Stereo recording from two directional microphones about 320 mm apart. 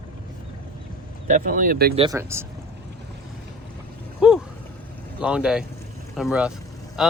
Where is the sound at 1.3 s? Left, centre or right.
Right.